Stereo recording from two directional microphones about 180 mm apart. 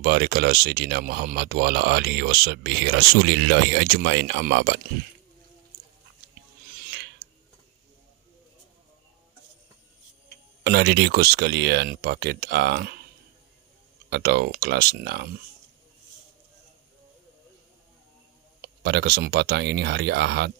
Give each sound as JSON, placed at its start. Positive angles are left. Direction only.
{"t": 0.0, "sound": "speech", "side_deg": -60}
{"t": 10.6, "sound": "speech", "side_deg": -65}
{"t": 14.1, "sound": "speech", "side_deg": -65}
{"t": 18.6, "sound": "speech", "side_deg": -65}